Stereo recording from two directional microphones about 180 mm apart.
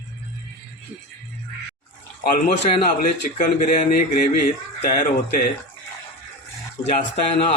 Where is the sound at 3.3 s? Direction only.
45° left (ahead or behind).